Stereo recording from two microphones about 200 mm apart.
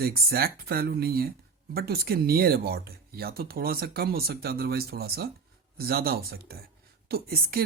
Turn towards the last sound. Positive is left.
turn(degrees=-50)  # may be behind; listen again after turning